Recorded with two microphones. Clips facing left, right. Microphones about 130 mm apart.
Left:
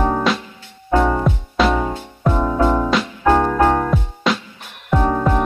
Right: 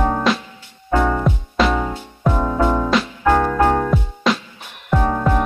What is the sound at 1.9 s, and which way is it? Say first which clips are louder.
Music: left 1 dB; 15° left (ahead or behind).